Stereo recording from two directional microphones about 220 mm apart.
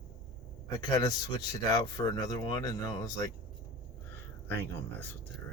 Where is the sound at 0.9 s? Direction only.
15° left (ahead or behind).